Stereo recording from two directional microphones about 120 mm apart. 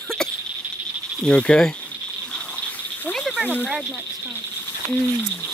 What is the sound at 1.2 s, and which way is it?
Speech, 10° left (ahead or behind).